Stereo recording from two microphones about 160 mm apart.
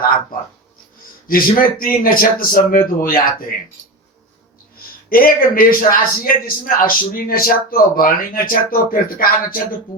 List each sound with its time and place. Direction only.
1.3 s a man's voice: 60° left (ahead or behind)
5.0 s a man's voice: 65° left (ahead or behind)